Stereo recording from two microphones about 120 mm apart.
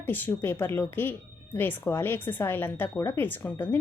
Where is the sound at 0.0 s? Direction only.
15° left (ahead or behind).